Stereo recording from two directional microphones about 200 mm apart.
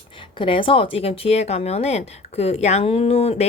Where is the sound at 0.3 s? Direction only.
25° left (ahead or behind).